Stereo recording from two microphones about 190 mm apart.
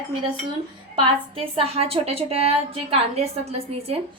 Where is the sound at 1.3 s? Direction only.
30° right (ahead or behind).